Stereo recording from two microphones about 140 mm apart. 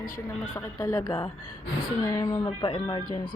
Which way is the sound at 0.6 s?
15° left (ahead or behind).